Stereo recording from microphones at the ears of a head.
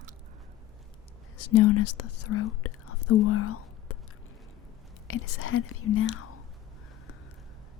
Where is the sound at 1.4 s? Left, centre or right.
Left.